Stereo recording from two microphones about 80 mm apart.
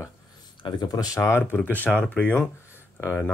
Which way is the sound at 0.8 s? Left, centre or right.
Left.